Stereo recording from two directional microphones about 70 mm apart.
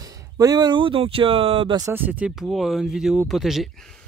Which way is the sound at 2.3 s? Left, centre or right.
Centre.